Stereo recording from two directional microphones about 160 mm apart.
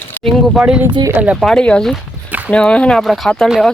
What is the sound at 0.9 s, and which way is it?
Speech, 30° right (ahead or behind).